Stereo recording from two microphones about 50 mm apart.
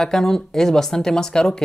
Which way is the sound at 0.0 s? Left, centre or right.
Centre.